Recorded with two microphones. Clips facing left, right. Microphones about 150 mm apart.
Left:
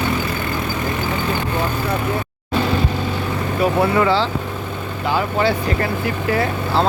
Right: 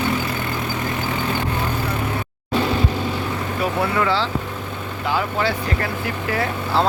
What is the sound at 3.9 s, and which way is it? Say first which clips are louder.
Speech: left 4 dB; 25° left (ahead or behind).